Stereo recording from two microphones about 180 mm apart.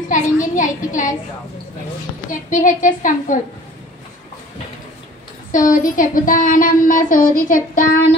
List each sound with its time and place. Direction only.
0.1 s a woman's voice: 45° left (ahead or behind)
2.5 s speech: 45° left (ahead or behind)
5.5 s speech: 45° left (ahead or behind)